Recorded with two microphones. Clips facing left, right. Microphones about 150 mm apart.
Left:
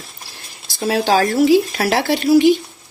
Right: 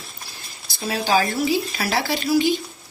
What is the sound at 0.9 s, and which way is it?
Speech, 70° left (ahead or behind).